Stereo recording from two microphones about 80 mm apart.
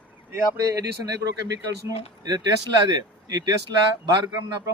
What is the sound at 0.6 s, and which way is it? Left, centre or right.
Speech, right.